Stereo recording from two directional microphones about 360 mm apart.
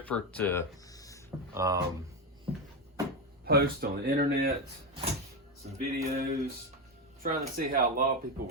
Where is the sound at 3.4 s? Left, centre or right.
Right.